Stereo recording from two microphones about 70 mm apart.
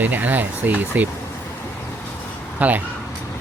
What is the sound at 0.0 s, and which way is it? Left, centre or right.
Speech, right.